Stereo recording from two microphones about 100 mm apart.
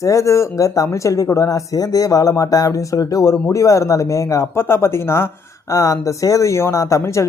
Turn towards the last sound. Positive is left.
turn(degrees=30)  # may be behind; listen again after turning